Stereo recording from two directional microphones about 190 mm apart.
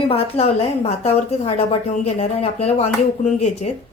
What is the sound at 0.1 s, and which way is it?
A woman's voice, 30° left (ahead or behind).